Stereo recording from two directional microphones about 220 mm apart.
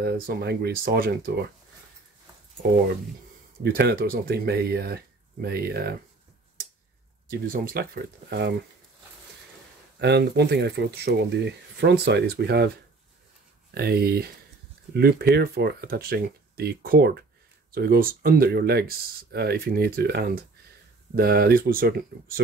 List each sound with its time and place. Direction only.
0.0 s speech: 45° right (ahead or behind)
3.6 s speech: 45° right (ahead or behind)
7.2 s speech: 40° right (ahead or behind)
9.9 s speech: 50° right (ahead or behind)
13.7 s speech: 45° right (ahead or behind)